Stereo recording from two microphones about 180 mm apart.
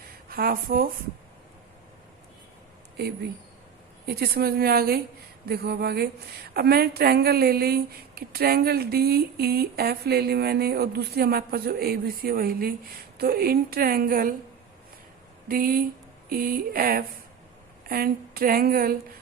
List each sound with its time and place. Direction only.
0.3 s a woman's voice: 55° right (ahead or behind)
4.0 s a woman's voice: 60° right (ahead or behind)
15.4 s a sound: 55° right (ahead or behind)
17.8 s a woman's voice: 55° right (ahead or behind)